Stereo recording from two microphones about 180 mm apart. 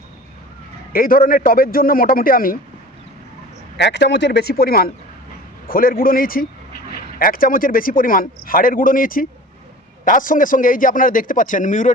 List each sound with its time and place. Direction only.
0.9 s a man's voice: 50° left (ahead or behind)
3.8 s a man's voice: 70° left (ahead or behind); by 11.9 s 45° left (ahead or behind)